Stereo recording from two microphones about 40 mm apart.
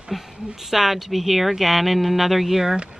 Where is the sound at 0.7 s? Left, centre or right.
Centre.